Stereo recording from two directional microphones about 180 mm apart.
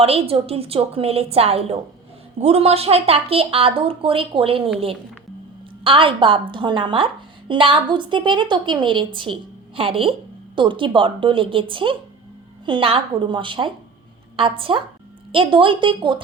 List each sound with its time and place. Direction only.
0.0 s a woman's voice: 35° right (ahead or behind)
5.8 s a woman's voice: 30° right (ahead or behind)